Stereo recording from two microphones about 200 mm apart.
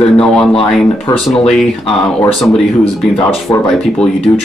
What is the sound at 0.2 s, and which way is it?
Speech, 5° left (ahead or behind).